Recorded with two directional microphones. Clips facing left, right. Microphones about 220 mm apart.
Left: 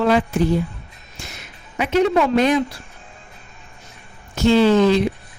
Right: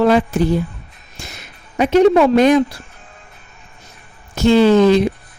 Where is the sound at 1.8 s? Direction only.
35° right (ahead or behind).